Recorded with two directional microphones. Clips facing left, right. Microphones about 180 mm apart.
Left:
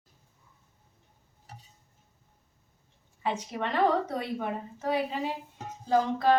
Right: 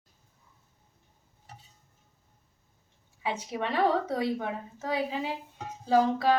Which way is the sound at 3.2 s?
10° right (ahead or behind).